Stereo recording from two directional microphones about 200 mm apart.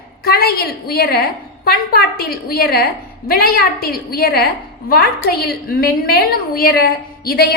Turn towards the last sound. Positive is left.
turn(degrees=50)  # may be behind; listen again after turning